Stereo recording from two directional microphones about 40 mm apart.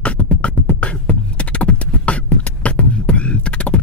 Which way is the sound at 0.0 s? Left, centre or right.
Left.